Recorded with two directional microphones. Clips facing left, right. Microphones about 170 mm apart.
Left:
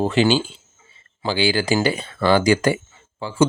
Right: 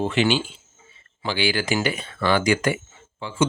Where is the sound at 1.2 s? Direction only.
30° left (ahead or behind).